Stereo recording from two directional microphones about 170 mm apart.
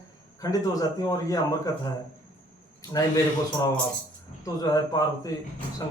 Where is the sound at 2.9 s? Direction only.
20° left (ahead or behind).